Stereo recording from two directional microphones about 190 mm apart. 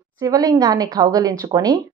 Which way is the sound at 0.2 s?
20° right (ahead or behind).